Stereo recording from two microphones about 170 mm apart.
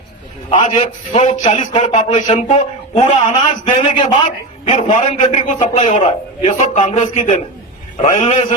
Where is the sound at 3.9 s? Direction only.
30° left (ahead or behind).